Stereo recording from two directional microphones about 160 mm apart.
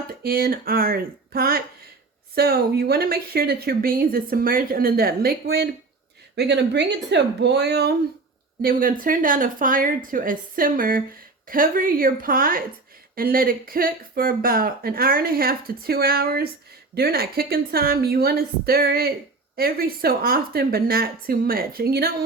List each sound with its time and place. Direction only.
0.2 s speech: 70° right (ahead or behind)
6.3 s speech: 90° right
8.6 s speech: 60° right (ahead or behind)